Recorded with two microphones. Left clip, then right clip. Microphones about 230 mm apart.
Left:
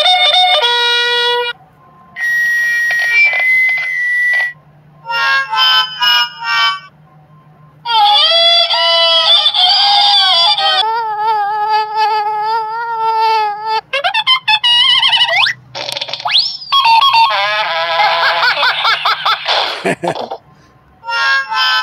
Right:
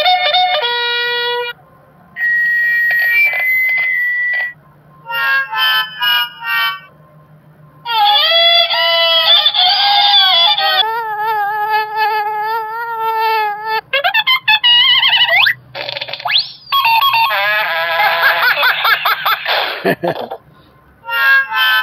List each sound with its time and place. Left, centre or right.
0.0 s music: left
2.1 s alarm: left
5.0 s harmonica: left
7.8 s honk: left
19.8 s a sound: centre
20.1 s a sound: left
21.0 s music: left